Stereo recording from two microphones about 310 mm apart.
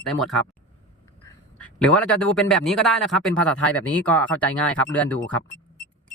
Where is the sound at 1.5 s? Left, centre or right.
Centre.